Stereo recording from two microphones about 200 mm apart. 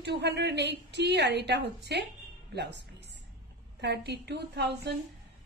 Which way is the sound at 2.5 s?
60° right (ahead or behind).